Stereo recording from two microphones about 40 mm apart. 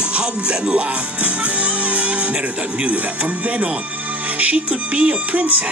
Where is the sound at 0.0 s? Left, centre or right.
Right.